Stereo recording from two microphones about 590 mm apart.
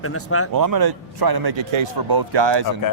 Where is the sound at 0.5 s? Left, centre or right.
Right.